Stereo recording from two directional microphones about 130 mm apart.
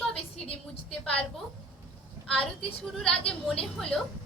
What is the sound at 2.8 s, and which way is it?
A woman's voice, 5° left (ahead or behind).